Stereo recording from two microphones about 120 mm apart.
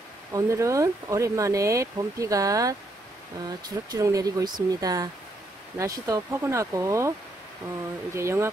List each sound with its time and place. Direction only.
0.3 s speech: 25° right (ahead or behind)